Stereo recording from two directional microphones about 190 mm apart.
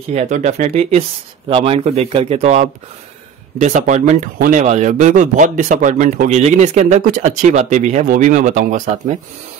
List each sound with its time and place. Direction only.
0.1 s speech: 40° right (ahead or behind)